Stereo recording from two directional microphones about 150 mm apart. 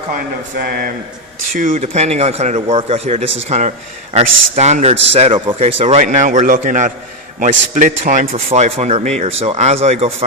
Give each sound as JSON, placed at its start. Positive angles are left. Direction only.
{"t": 0.1, "sound": "speech", "side_deg": -80}
{"t": 1.5, "sound": "a man's voice", "side_deg": -60}
{"t": 1.8, "sound": "a man's voice", "side_deg": -45}
{"t": 8.3, "sound": "a man's voice", "side_deg": -45}